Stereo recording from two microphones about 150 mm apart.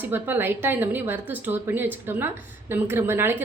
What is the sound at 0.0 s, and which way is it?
A woman's voice, 15° right (ahead or behind).